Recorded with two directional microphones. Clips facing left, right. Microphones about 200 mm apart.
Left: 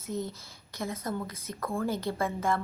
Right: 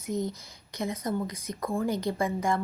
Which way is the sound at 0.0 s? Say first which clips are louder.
Right 4 dB; 15° right (ahead or behind).